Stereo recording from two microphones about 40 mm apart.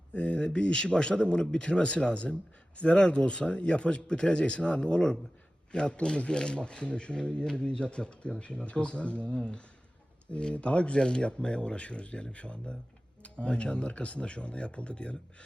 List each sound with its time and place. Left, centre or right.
0.1 s speech: left